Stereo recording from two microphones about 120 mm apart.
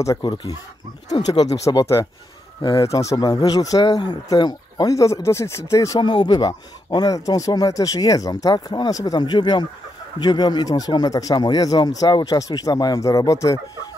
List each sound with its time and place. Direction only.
0.2 s speech: 40° left (ahead or behind)
5.9 s speech: 40° left (ahead or behind)